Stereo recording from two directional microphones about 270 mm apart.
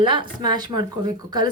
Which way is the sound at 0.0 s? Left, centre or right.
Centre.